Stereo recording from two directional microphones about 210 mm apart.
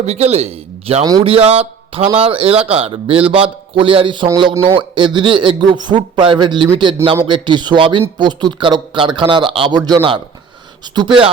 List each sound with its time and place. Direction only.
0.0 s a man's voice: 30° right (ahead or behind)